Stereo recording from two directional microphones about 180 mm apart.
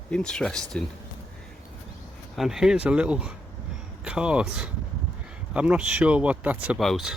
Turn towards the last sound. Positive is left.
turn(degrees=0)  # may be behind; listen again after turning